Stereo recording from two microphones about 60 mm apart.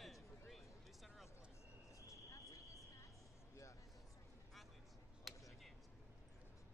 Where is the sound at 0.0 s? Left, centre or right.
Centre.